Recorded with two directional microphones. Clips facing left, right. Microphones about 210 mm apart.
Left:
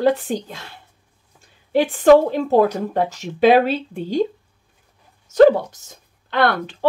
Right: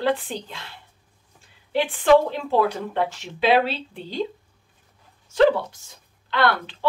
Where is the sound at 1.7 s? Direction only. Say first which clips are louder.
Left 5 dB; 45° left (ahead or behind).